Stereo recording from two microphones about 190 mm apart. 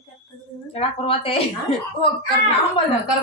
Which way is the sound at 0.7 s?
30° left (ahead or behind).